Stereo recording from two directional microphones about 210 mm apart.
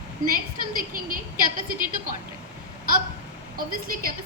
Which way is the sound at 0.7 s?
40° right (ahead or behind).